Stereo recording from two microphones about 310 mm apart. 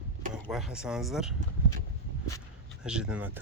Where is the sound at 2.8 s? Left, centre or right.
Centre.